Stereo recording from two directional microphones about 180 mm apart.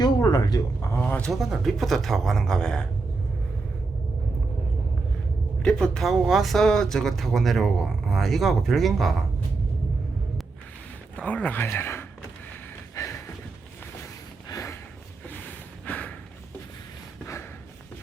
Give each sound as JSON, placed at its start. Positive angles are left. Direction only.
{"t": 0.0, "sound": "a sound", "side_deg": 20}
{"t": 5.6, "sound": "speech", "side_deg": 5}
{"t": 11.2, "sound": "speech", "side_deg": 10}
{"t": 13.0, "sound": "a sound", "side_deg": 15}
{"t": 14.5, "sound": "snort", "side_deg": 15}
{"t": 15.9, "sound": "snort", "side_deg": 10}